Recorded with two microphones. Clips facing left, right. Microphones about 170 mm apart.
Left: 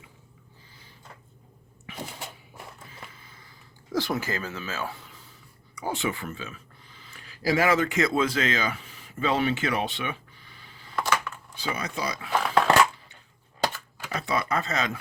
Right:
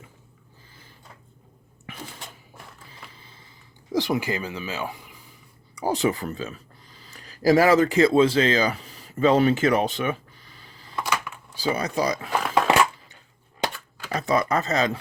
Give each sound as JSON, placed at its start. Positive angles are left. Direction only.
{"t": 1.9, "sound": "a sound", "side_deg": -50}
{"t": 3.1, "sound": "a sound", "side_deg": -30}
{"t": 3.9, "sound": "speech", "side_deg": -15}
{"t": 5.7, "sound": "speech", "side_deg": -35}
{"t": 12.4, "sound": "biting", "side_deg": -5}
{"t": 14.1, "sound": "speech", "side_deg": -40}